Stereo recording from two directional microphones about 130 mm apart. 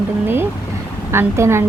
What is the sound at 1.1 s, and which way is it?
Speech, 20° right (ahead or behind).